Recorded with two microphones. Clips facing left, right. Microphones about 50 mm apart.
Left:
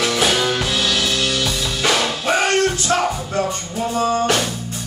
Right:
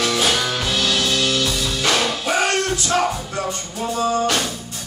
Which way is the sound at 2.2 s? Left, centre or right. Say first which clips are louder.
Left 6 dB; left.